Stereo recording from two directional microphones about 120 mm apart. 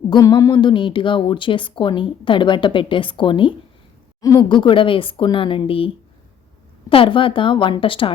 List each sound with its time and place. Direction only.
0.1 s speech: 30° left (ahead or behind)
4.2 s speech: 30° left (ahead or behind); by 5.9 s 50° left (ahead or behind)
6.9 s speech: 45° left (ahead or behind)